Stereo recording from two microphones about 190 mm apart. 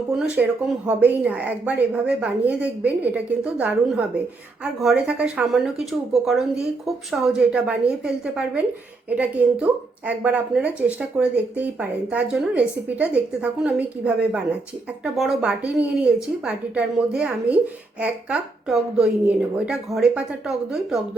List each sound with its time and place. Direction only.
0.4 s a woman's voice: 5° right (ahead or behind)